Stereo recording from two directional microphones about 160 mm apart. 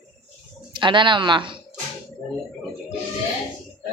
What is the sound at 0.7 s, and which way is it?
Speech, 30° right (ahead or behind).